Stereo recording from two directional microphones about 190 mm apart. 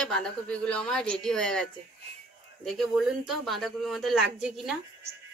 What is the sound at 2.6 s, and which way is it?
A woman's voice, centre (ahead or behind).